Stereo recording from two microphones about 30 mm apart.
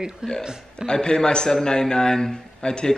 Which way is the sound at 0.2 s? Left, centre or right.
Right.